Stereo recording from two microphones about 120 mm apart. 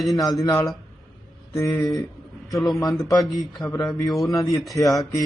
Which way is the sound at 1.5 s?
25° left (ahead or behind).